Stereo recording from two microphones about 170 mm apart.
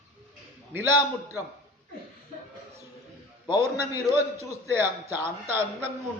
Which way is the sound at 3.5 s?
15° right (ahead or behind).